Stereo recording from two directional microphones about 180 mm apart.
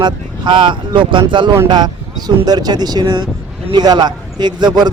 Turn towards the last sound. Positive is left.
turn(degrees=-25)  # may be behind; listen again after turning